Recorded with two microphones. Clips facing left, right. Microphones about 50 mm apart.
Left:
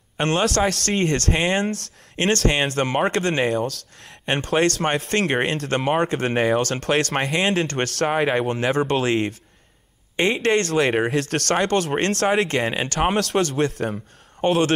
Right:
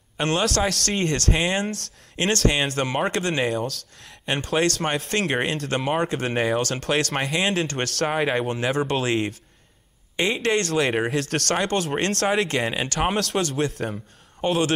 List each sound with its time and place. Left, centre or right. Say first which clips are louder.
0.2 s speech: left 2 dB; left
5.3 s speech: left 2 dB; left
10.4 s speech: left 2 dB; left
11.1 s speech: left 2 dB; left
13.1 s speech: left 3 dB; left